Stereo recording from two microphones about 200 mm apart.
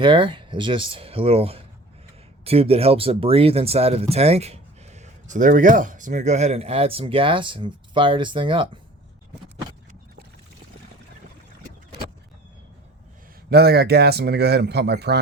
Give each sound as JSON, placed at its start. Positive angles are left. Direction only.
{"t": 0.0, "sound": "speech", "side_deg": -25}
{"t": 13.5, "sound": "speech", "side_deg": -50}